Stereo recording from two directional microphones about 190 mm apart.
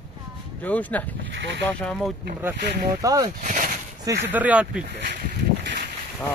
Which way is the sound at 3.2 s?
40° right (ahead or behind).